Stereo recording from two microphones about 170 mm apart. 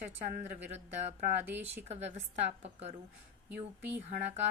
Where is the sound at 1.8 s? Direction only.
40° right (ahead or behind).